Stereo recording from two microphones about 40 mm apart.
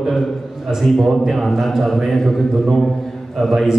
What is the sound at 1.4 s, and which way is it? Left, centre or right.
Speech, centre.